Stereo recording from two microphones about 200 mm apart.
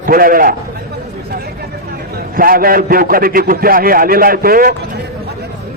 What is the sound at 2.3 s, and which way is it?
A man's voice, 45° right (ahead or behind).